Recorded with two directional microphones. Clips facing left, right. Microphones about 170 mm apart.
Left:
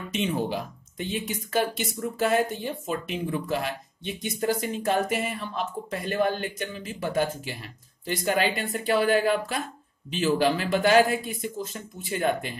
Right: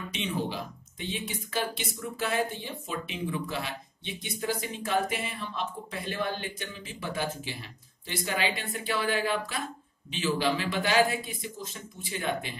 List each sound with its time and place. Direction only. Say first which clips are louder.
0.1 s speech: left 6 dB; 45° left (ahead or behind)